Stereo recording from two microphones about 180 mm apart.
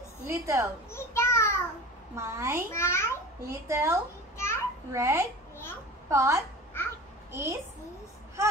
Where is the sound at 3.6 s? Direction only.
15° right (ahead or behind).